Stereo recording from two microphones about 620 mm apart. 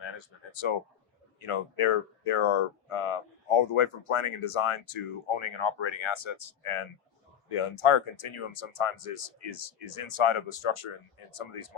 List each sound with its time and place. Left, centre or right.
0.0 s speech: left